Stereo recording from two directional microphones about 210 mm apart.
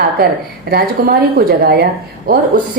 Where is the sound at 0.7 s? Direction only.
45° right (ahead or behind).